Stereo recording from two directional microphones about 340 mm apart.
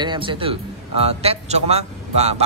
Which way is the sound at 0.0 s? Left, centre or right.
Centre.